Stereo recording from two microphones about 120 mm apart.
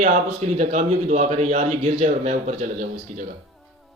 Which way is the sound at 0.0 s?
80° right.